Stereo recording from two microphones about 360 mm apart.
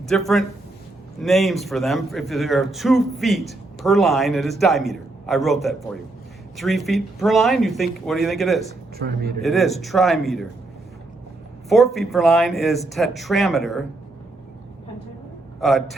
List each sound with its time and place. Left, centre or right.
0.0 s speech: centre
9.0 s a man's voice: right
9.4 s speech: centre
11.9 s speech: centre
15.6 s speech: centre